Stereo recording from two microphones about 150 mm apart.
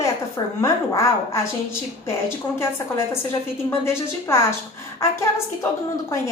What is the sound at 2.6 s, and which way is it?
A woman's voice, 15° left (ahead or behind).